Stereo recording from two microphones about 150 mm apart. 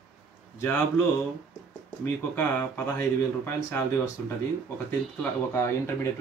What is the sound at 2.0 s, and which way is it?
Speech, 15° left (ahead or behind).